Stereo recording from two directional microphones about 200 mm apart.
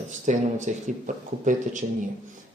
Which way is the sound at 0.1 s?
35° right (ahead or behind).